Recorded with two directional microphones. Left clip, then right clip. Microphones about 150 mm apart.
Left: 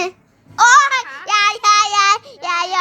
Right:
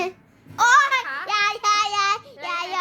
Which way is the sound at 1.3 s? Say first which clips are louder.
Left 8 dB; 15° left (ahead or behind).